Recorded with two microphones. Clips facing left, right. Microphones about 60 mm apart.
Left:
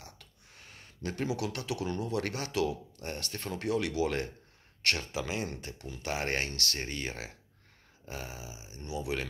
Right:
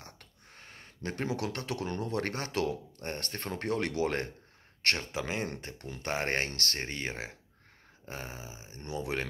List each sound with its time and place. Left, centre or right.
0.0 s speech: right
6.8 s speech: right